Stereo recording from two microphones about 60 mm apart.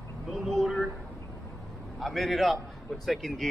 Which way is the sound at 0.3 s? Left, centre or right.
Centre.